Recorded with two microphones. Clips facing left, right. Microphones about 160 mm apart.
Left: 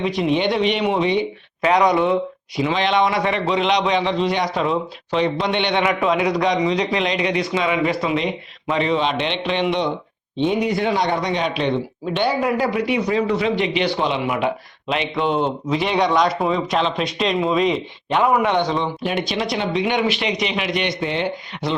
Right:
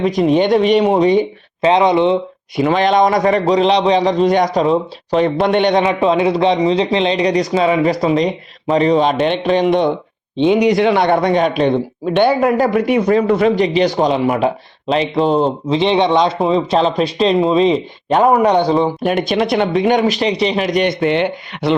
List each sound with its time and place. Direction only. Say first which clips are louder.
0.0 s speech: right 6 dB; 45° right (ahead or behind)
1.6 s speech: right 4 dB; 25° right (ahead or behind)
2.6 s speech: right 6 dB; 50° right (ahead or behind)
5.8 s a man's voice: right 5 dB; 30° right (ahead or behind); by 9.9 s 45° right (ahead or behind)
10.3 s speech: right 7 dB; 90° right; by 21.8 s 65° right (ahead or behind)